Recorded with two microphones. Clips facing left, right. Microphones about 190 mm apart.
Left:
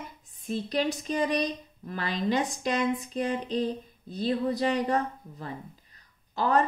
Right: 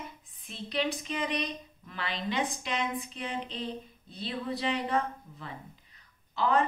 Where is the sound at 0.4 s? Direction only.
40° left (ahead or behind).